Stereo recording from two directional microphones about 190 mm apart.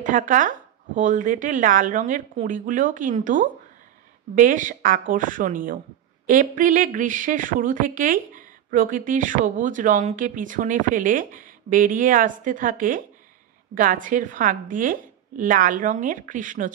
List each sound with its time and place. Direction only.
0.0 s a woman's voice: 45° right (ahead or behind)